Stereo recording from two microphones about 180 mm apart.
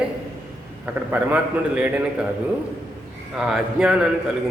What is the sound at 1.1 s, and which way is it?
A man's voice, 10° right (ahead or behind).